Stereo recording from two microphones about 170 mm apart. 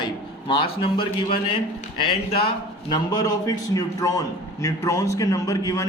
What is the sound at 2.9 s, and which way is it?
A man's voice, 20° left (ahead or behind).